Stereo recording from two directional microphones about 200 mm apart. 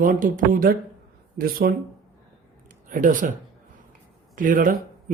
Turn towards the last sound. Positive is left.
turn(degrees=-40)  # may be behind; listen again after turning